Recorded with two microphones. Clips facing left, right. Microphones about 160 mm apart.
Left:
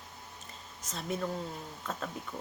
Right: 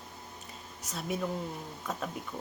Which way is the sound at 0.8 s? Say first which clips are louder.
Right 1 dB; 10° right (ahead or behind).